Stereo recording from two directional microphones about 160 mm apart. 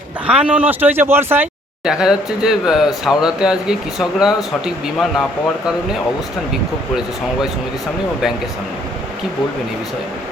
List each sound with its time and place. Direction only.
0.3 s speech: 5° right (ahead or behind)